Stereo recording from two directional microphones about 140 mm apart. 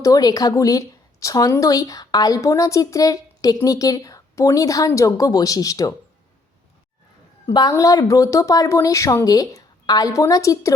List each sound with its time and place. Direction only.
0.0 s a woman's voice: 25° left (ahead or behind)
7.4 s a woman's voice: 25° left (ahead or behind)